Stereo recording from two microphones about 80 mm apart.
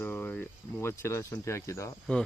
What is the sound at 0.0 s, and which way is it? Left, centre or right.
Cricket, left.